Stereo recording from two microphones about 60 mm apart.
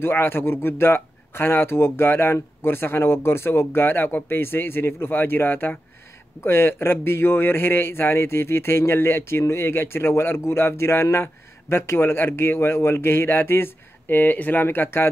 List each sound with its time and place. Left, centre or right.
0.0 s a man's voice: left